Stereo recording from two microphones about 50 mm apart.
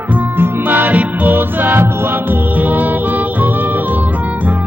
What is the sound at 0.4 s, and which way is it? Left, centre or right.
Music, right.